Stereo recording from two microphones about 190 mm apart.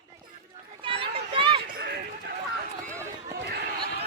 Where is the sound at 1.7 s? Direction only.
50° right (ahead or behind).